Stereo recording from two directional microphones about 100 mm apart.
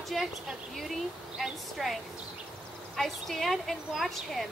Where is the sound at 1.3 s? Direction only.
Centre (ahead or behind).